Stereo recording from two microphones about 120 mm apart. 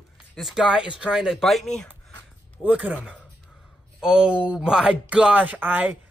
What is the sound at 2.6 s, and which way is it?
Speech, 15° right (ahead or behind).